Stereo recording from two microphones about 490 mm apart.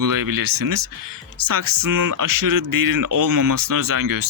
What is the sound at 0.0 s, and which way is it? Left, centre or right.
Speech, right.